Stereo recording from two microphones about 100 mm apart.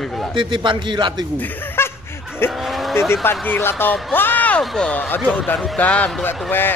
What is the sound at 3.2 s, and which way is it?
A man's voice, 20° left (ahead or behind).